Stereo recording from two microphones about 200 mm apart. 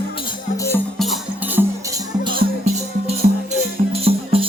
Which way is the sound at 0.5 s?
15° left (ahead or behind).